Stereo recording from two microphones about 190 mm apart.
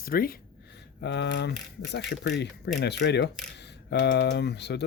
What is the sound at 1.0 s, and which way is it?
Speech, 65° left (ahead or behind).